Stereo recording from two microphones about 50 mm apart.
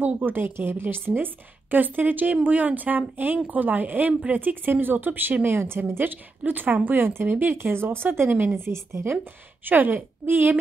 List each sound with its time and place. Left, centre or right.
0.0 s a woman's voice: right
4.6 s a woman's voice: right
8.5 s a woman's voice: right
9.7 s a woman's voice: right